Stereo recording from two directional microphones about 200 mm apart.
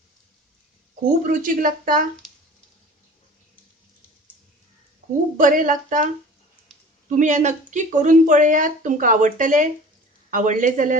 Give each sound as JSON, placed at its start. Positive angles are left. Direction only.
{"t": 1.2, "sound": "speech", "side_deg": -40}
{"t": 5.4, "sound": "speech", "side_deg": -40}
{"t": 6.7, "sound": "a sound", "side_deg": 0}
{"t": 7.2, "sound": "speech", "side_deg": -35}